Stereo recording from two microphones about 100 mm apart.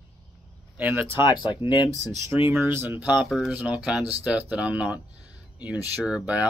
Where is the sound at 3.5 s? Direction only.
10° right (ahead or behind).